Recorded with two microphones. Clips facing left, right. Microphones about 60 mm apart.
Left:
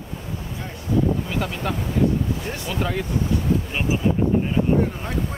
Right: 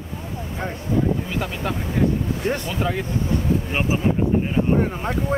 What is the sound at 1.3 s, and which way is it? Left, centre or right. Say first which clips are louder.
Speech: even; centre.